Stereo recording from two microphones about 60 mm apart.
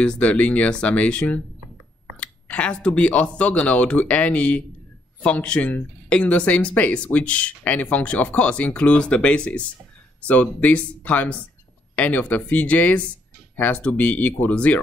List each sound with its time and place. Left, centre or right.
0.0 s speech: centre